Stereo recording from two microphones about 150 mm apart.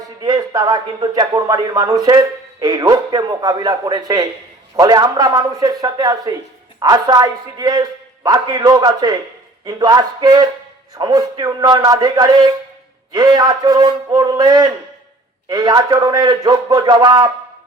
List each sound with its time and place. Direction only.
0.2 s speech: 25° right (ahead or behind)